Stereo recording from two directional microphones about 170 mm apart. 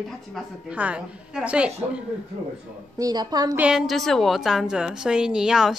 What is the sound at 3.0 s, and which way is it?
Speech, 25° right (ahead or behind).